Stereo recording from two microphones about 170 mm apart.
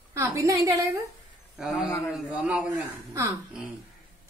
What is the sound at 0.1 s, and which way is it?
Speech, 15° right (ahead or behind).